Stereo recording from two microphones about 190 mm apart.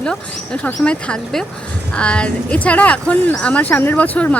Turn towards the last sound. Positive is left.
turn(degrees=10)  # may be behind; listen again after turning